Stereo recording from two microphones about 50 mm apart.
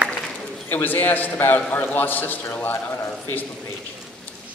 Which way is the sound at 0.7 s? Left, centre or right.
Left.